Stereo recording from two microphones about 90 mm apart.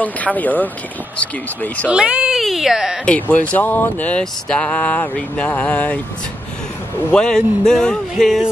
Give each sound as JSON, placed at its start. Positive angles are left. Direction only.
{"t": 0.0, "sound": "speech", "side_deg": 15}
{"t": 1.9, "sound": "speech", "side_deg": -10}
{"t": 3.1, "sound": "speech", "side_deg": 20}
{"t": 7.1, "sound": "speech", "side_deg": 10}